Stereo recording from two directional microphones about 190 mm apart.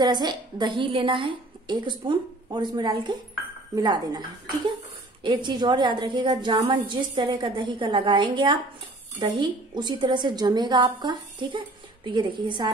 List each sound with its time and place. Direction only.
0.0 s a woman's voice: 20° right (ahead or behind)
5.2 s a woman's voice: 25° right (ahead or behind)